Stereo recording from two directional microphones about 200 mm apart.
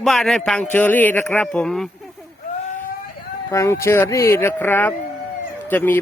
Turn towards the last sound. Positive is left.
turn(degrees=10)  # may be behind; listen again after turning